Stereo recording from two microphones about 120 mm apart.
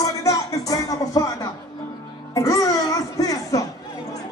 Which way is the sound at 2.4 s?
25° left (ahead or behind).